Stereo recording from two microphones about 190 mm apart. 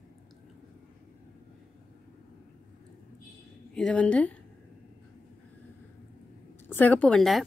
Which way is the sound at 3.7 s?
5° left (ahead or behind).